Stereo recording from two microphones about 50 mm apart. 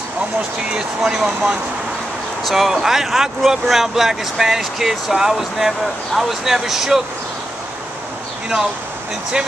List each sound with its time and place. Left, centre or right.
0.7 s speech: centre
1.1 s speech: centre